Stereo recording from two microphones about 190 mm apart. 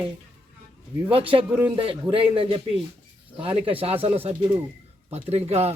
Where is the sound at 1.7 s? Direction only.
25° right (ahead or behind).